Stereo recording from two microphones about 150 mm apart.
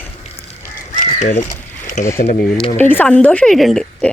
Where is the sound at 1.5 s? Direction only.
55° left (ahead or behind).